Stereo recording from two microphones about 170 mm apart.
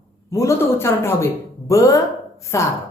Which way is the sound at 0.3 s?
20° left (ahead or behind).